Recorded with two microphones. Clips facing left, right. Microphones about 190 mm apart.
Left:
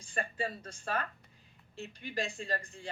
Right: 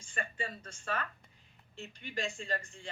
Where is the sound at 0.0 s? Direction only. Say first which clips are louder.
Left 4 dB; 35° left (ahead or behind).